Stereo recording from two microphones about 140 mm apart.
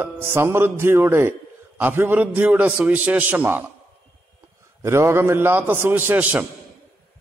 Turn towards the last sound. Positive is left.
turn(degrees=-10)  # may be behind; listen again after turning